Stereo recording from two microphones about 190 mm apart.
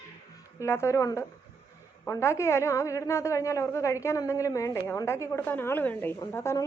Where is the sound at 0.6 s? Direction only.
15° left (ahead or behind).